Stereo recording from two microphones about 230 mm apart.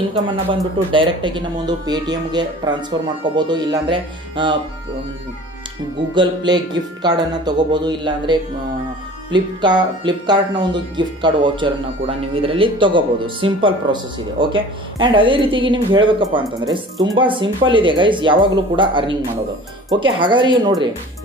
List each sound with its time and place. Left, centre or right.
0.9 s speech: right
6.1 s speech: centre